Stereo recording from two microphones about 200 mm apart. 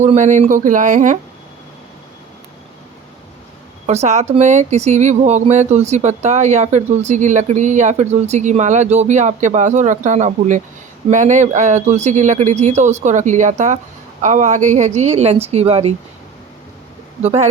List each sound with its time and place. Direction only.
0.0 s speech: 35° right (ahead or behind)
3.8 s speech: 35° right (ahead or behind)
17.2 s speech: 30° right (ahead or behind)